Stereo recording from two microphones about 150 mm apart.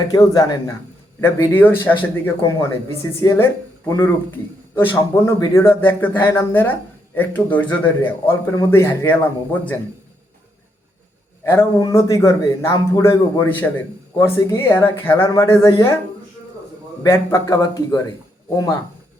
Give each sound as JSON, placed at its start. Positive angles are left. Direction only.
{"t": 0.1, "sound": "a man's voice", "side_deg": 25}
{"t": 1.2, "sound": "speech", "side_deg": 15}
{"t": 11.8, "sound": "a man's voice", "side_deg": 25}
{"t": 17.0, "sound": "a man's voice", "side_deg": 15}